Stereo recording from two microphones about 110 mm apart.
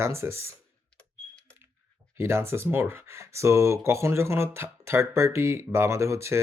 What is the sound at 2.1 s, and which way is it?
Speech, 25° right (ahead or behind).